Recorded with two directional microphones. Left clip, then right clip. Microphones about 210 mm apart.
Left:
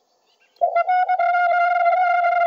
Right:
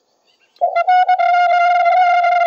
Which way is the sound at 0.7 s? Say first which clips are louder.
Right 7 dB; 45° right (ahead or behind).